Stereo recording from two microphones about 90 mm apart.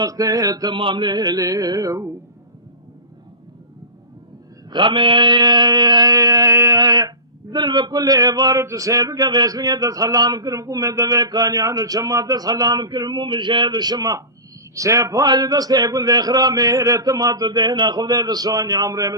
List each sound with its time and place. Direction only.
0.0 s speech: 45° right (ahead or behind)
0.7 s speech: 70° right (ahead or behind); by 2.0 s 40° right (ahead or behind)
4.7 s speech: 65° right (ahead or behind); by 6.7 s 35° right (ahead or behind)
6.7 s a sound: 50° right (ahead or behind)
7.5 s speech: 55° right (ahead or behind)